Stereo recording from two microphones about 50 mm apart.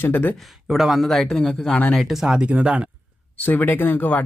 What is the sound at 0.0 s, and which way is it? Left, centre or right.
Speech, left.